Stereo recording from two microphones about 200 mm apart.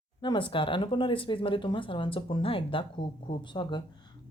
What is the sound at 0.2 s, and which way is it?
A woman's voice, 25° left (ahead or behind).